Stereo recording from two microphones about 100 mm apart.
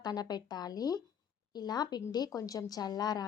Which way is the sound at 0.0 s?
45° left (ahead or behind).